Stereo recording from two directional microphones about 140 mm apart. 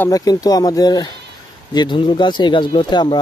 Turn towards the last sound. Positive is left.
turn(degrees=35)  # may be behind; listen again after turning